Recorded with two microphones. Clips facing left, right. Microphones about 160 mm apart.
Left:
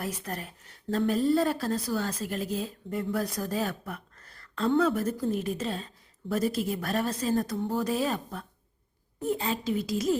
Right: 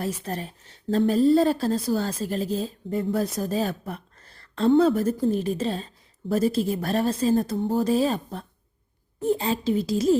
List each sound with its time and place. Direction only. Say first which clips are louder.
0.0 s a woman's voice: right 5 dB; 30° right (ahead or behind)